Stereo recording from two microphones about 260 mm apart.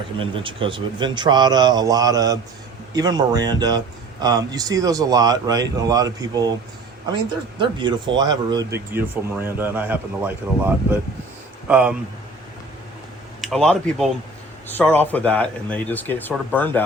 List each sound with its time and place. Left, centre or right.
0.2 s speech: centre
7.6 s speech: centre
13.4 s speech: centre